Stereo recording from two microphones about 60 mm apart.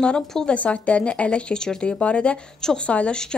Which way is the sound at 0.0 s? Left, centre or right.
Centre.